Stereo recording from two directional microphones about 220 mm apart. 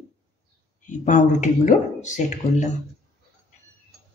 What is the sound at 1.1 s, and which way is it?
Speech, 35° left (ahead or behind).